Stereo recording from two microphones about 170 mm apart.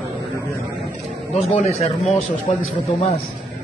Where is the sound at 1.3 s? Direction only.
40° left (ahead or behind).